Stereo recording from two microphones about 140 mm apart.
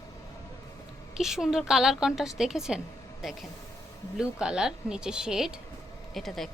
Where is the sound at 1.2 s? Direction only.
5° right (ahead or behind).